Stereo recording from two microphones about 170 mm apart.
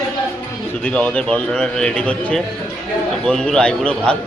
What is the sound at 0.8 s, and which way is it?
A man's voice, 5° left (ahead or behind).